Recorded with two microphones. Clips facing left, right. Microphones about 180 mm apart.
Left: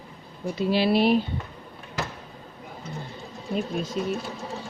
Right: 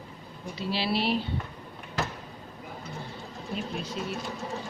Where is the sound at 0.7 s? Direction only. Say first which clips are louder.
Left 7 dB; 50° left (ahead or behind).